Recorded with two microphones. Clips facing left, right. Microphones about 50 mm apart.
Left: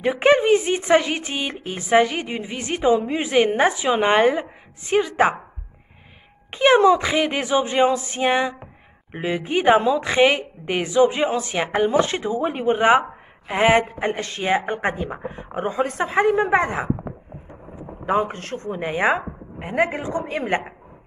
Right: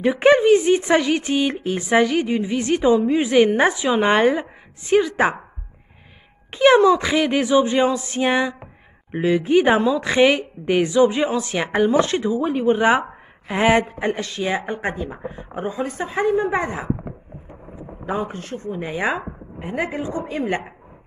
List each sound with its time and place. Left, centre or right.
0.0 s a woman's voice: centre
6.5 s a woman's voice: centre
12.3 s speech: left
13.5 s speech: centre
14.3 s a woman's voice: left
18.0 s speech: left